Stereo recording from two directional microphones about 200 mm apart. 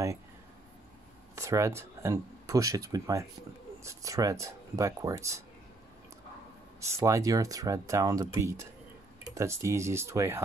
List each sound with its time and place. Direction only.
1.3 s speech: 15° right (ahead or behind)
7.0 s speech: 15° right (ahead or behind)